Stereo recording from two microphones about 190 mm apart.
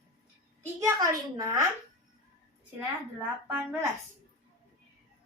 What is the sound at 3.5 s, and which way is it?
Speech, 10° right (ahead or behind).